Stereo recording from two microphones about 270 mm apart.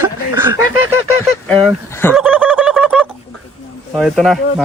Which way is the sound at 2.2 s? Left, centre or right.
Centre.